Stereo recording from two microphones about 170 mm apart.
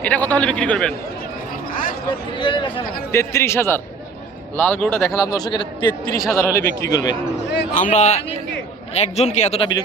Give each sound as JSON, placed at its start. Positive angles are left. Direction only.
{"t": 0.0, "sound": "a man's voice", "side_deg": 10}
{"t": 1.7, "sound": "a sound", "side_deg": 55}
{"t": 2.4, "sound": "a man's voice", "side_deg": 30}
{"t": 3.1, "sound": "a man's voice", "side_deg": 15}
{"t": 7.7, "sound": "speech", "side_deg": 45}